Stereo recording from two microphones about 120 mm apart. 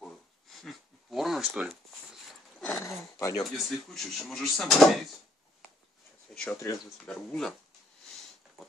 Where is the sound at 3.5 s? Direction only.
Centre (ahead or behind).